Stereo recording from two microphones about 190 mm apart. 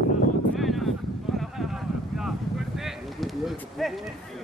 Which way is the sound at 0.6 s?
Centre (ahead or behind).